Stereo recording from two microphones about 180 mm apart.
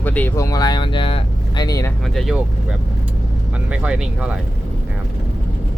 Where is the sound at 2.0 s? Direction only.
Centre (ahead or behind).